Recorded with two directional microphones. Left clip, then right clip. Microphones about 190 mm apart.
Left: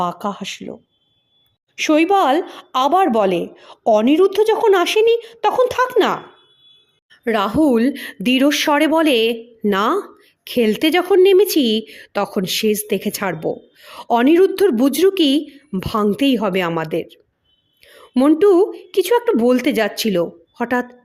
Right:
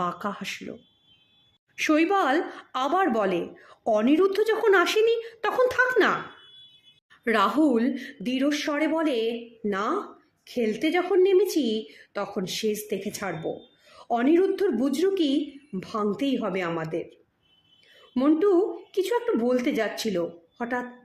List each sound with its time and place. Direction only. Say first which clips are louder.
0.0 s a woman's voice: left 7 dB; 25° left (ahead or behind); by 20.8 s 50° left (ahead or behind)